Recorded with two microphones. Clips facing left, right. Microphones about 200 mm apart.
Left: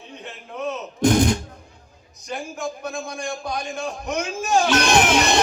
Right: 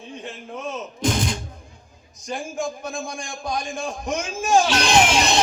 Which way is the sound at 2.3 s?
65° left (ahead or behind).